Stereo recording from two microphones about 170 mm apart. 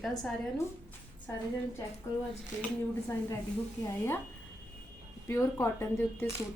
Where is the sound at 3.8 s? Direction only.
15° left (ahead or behind).